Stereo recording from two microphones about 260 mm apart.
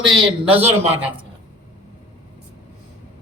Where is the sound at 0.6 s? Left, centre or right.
Centre.